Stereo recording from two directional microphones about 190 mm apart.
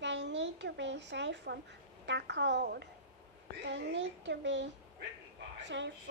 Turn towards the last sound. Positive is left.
turn(degrees=-75)  # may be behind; listen again after turning